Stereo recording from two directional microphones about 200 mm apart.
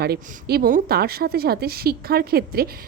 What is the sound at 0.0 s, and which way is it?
A woman's voice, 50° right (ahead or behind).